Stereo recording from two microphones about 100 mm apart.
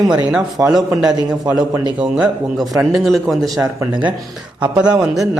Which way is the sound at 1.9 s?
10° right (ahead or behind).